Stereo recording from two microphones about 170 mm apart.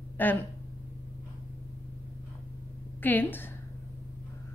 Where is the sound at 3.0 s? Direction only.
10° left (ahead or behind).